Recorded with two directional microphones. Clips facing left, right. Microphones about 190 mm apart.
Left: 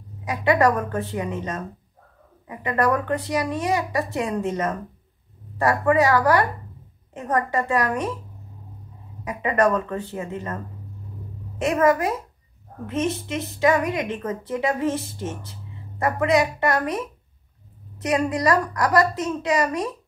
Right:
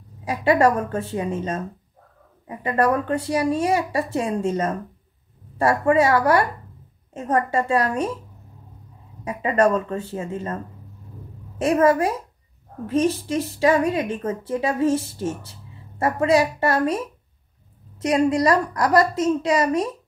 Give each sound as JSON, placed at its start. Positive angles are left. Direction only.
{"t": 0.2, "sound": "a woman's voice", "side_deg": -30}
{"t": 9.2, "sound": "a woman's voice", "side_deg": -30}
{"t": 18.3, "sound": "a woman's voice", "side_deg": -30}